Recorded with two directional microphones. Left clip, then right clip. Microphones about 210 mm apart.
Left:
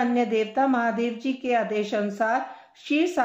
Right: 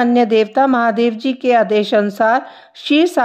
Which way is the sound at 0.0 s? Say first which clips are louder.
Right 10 dB; 50° right (ahead or behind).